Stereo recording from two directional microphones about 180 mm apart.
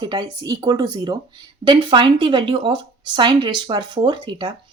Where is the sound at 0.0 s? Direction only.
25° right (ahead or behind).